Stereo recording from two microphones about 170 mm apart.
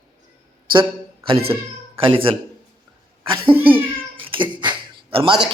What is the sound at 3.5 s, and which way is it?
Cat, 10° right (ahead or behind).